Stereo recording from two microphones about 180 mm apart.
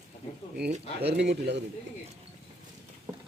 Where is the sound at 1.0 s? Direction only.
65° right (ahead or behind).